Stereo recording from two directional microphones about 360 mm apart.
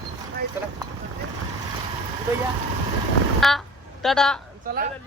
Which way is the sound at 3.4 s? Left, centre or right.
Centre.